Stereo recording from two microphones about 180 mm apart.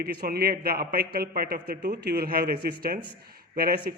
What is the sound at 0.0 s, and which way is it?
A man's voice, 55° right (ahead or behind).